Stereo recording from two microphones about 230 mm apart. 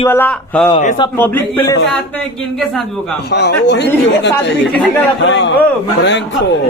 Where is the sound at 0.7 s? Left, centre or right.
Left.